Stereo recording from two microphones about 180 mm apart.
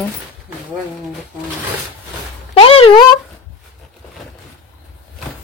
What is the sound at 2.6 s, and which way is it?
Speech, 30° left (ahead or behind).